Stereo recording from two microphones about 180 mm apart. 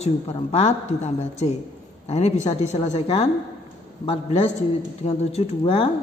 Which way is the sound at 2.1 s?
40° left (ahead or behind).